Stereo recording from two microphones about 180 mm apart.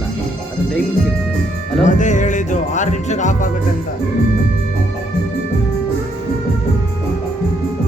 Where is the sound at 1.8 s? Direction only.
45° left (ahead or behind).